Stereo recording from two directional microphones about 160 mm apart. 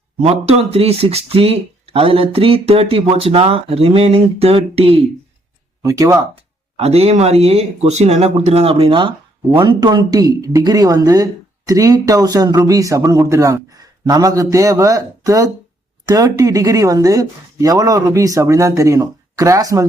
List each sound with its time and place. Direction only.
0.2 s speech: 40° right (ahead or behind)
5.8 s speech: 20° right (ahead or behind)
6.7 s speech: 40° right (ahead or behind); by 19.8 s 20° right (ahead or behind)